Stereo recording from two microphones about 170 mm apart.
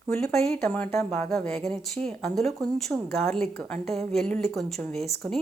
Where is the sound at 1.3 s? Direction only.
Centre (ahead or behind).